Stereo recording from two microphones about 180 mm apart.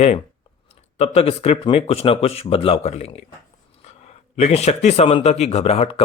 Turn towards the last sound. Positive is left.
turn(degrees=35)  # may be behind; listen again after turning